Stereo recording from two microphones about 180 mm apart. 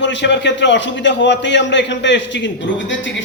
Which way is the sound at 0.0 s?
80° left.